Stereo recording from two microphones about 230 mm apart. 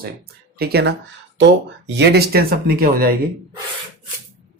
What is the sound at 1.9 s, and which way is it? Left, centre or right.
Speech, right.